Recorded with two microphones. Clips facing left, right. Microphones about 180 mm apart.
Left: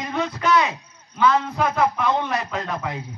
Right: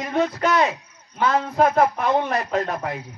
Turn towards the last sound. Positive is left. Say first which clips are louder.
# right 3 dB
turn(degrees=-40)  # may be behind; listen again after turning